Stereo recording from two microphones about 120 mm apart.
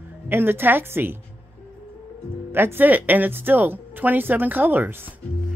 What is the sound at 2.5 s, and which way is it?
Speech, 20° right (ahead or behind).